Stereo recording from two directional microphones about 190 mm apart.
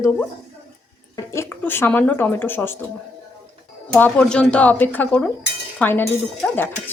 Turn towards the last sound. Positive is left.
turn(degrees=10)  # may be behind; listen again after turning